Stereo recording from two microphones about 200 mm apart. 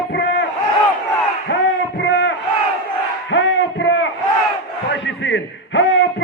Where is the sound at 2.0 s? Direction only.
65° left (ahead or behind).